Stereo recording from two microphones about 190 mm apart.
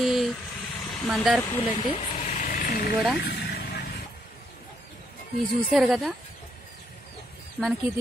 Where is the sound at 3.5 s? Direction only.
60° left (ahead or behind).